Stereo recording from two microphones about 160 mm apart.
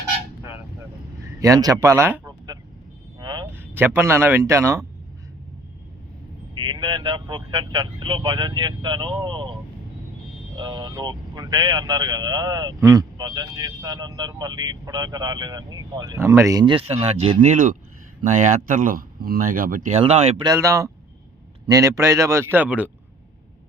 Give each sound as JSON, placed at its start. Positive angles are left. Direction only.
{"t": 1.4, "sound": "speech", "side_deg": -20}
{"t": 3.2, "sound": "vehicle", "side_deg": -25}
{"t": 3.4, "sound": "speech", "side_deg": -15}
{"t": 6.5, "sound": "speech", "side_deg": -30}
{"t": 19.9, "sound": "speech", "side_deg": -40}
{"t": 20.4, "sound": "speech", "side_deg": -20}